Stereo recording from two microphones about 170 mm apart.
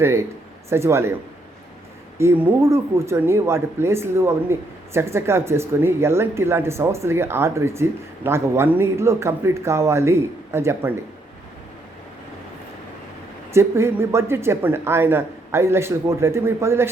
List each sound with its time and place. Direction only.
0.7 s speech: 15° right (ahead or behind)
2.1 s speech: 15° right (ahead or behind)
13.5 s speech: 15° right (ahead or behind)